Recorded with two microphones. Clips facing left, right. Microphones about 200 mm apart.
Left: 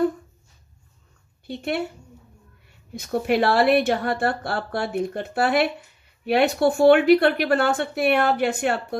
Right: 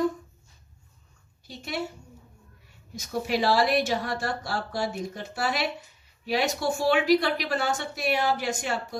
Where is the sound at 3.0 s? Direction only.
60° left (ahead or behind).